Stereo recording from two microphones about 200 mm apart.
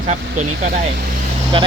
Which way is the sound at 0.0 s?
40° right (ahead or behind).